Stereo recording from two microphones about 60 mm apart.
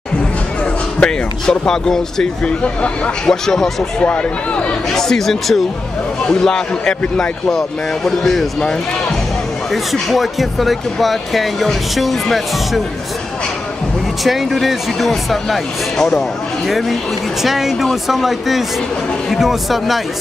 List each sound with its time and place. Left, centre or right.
0.9 s speech: centre
2.6 s speech: centre
3.4 s speech: centre
4.0 s speech: left
4.9 s speech: centre
10.0 s speech: centre
14.2 s speech: centre